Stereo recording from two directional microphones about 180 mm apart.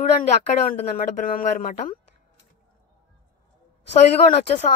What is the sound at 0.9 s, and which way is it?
Speech, 50° left (ahead or behind).